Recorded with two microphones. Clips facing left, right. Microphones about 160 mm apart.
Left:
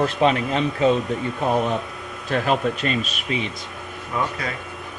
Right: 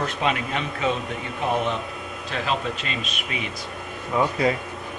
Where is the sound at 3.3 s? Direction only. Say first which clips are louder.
Left 6 dB; 30° left (ahead or behind).